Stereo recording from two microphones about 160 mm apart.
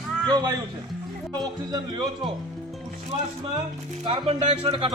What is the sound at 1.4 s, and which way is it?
Speech, 25° right (ahead or behind).